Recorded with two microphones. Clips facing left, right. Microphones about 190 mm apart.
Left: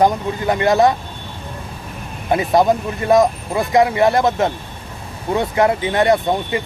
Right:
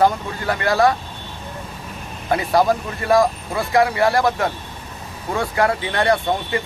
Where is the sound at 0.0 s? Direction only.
20° left (ahead or behind).